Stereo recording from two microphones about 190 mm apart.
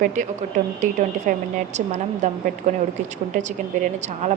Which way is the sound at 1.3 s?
40° right (ahead or behind).